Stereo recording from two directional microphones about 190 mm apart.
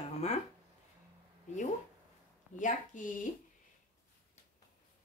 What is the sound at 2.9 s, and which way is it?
Speech, 45° left (ahead or behind).